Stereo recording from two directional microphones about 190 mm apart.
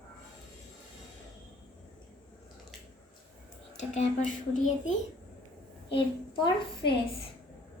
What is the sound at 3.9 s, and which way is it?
Speech, 40° left (ahead or behind).